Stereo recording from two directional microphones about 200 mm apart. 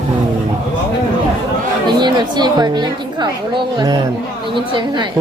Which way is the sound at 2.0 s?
20° right (ahead or behind).